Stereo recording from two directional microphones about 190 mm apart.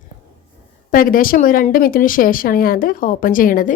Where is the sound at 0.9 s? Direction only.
45° left (ahead or behind).